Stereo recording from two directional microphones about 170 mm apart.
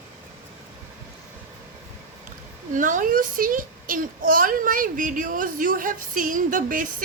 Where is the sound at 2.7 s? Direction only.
50° right (ahead or behind).